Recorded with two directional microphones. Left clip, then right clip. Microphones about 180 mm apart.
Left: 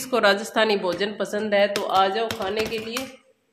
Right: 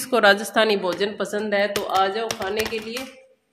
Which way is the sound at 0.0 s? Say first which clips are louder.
Right 3 dB; 20° right (ahead or behind).